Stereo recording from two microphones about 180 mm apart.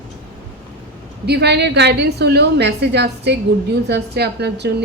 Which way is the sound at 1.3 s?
65° right (ahead or behind).